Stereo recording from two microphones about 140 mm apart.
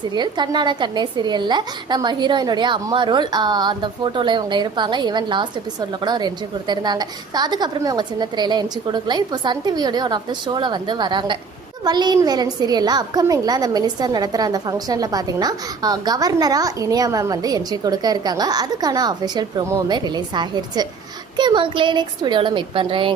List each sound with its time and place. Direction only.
0.1 s a woman's voice: 30° right (ahead or behind)